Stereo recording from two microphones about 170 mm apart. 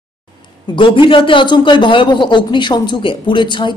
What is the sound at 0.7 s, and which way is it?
A man's voice, 30° left (ahead or behind).